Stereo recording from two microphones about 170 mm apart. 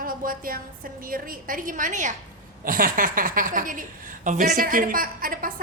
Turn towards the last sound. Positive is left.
turn(degrees=-55)  # may be behind; listen again after turning